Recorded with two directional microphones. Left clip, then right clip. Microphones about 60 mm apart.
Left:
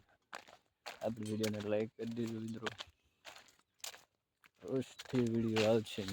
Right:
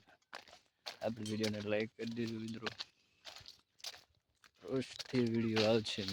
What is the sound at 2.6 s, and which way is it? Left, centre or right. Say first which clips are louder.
Speech: even; left.